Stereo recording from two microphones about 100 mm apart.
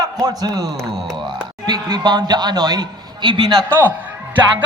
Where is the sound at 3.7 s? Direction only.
20° right (ahead or behind).